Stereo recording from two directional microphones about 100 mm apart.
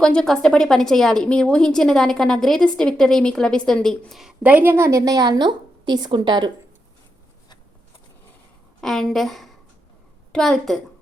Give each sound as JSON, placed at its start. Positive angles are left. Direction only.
{"t": 0.0, "sound": "a woman's voice", "side_deg": 5}
{"t": 4.1, "sound": "a woman's voice", "side_deg": -5}
{"t": 4.4, "sound": "a woman's voice", "side_deg": -20}
{"t": 8.8, "sound": "a woman's voice", "side_deg": 5}